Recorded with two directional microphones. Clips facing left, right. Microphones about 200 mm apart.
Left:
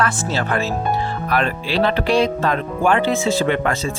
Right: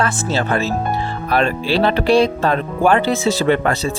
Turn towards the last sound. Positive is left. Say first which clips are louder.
# right 3 dB
turn(degrees=-35)  # may be behind; listen again after turning